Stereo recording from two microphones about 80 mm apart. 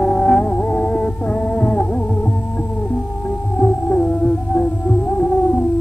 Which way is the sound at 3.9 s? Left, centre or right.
Centre.